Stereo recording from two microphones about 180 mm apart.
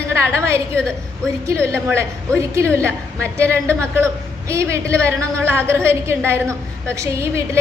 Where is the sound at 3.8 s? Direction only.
15° right (ahead or behind).